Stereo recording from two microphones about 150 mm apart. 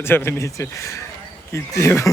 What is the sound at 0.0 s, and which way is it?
Speech, 15° left (ahead or behind).